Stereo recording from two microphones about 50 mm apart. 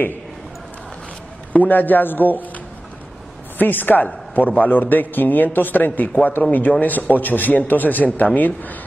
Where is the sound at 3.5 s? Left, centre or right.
Left.